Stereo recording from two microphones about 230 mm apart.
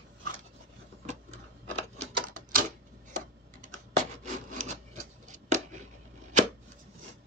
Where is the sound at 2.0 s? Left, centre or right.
Right.